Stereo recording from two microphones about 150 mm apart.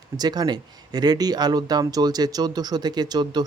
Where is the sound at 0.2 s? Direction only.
25° right (ahead or behind).